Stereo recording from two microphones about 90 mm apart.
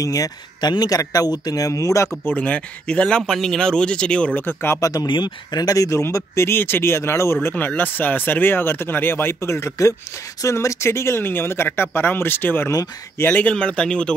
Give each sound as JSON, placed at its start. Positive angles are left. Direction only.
{"t": 0.0, "sound": "speech", "side_deg": 40}
{"t": 2.2, "sound": "speech", "side_deg": 15}
{"t": 4.7, "sound": "speech", "side_deg": 40}
{"t": 5.0, "sound": "speech", "side_deg": 55}